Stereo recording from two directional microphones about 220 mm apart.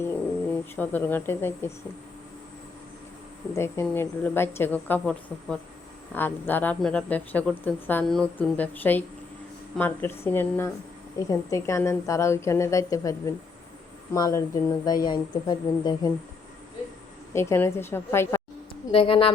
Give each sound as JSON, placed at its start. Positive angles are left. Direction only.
{"t": 0.8, "sound": "speech", "side_deg": 10}
{"t": 3.5, "sound": "a woman's voice", "side_deg": 10}
{"t": 17.3, "sound": "speech", "side_deg": 10}
{"t": 18.9, "sound": "a woman's voice", "side_deg": 25}